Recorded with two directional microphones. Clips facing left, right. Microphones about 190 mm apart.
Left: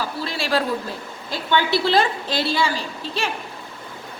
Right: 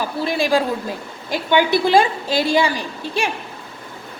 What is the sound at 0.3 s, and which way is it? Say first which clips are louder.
A woman's voice: right 5 dB; 15° right (ahead or behind).